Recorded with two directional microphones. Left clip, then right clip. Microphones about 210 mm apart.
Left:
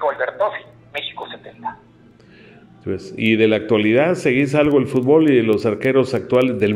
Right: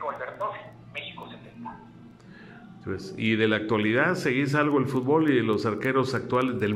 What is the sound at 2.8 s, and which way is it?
Speech, 10° left (ahead or behind).